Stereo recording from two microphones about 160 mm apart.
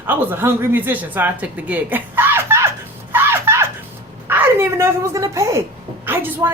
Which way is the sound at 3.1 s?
15° right (ahead or behind).